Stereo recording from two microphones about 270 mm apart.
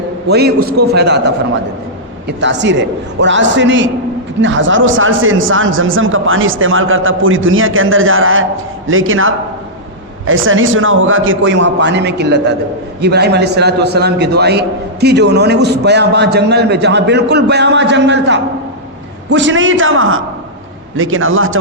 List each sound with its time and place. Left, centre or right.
0.3 s a man's voice: right